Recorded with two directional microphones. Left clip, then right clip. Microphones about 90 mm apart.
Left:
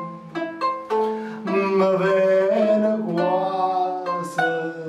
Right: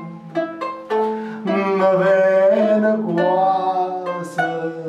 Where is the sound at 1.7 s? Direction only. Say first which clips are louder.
Right 4 dB; 20° right (ahead or behind).